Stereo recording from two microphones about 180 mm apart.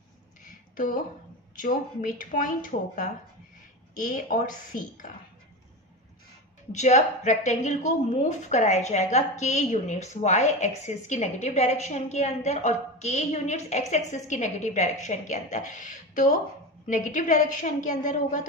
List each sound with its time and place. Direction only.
0.7 s a woman's voice: 50° left (ahead or behind)
6.7 s a woman's voice: 40° left (ahead or behind)